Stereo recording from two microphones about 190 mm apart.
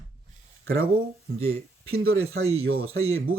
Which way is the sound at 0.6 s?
90° right.